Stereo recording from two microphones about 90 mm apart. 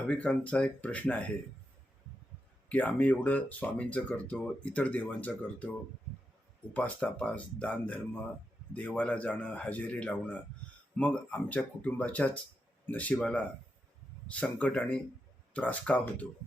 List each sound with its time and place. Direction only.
0.1 s speech: 15° left (ahead or behind)
2.6 s speech: 20° left (ahead or behind)
6.7 s speech: 15° left (ahead or behind)